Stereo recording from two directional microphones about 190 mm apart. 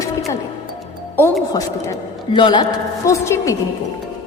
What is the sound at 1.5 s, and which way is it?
A woman's voice, 20° left (ahead or behind).